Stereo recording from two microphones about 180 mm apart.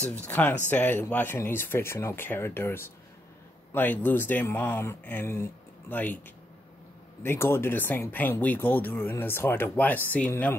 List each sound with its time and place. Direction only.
0.0 s speech: 10° left (ahead or behind)
7.2 s speech: 15° left (ahead or behind)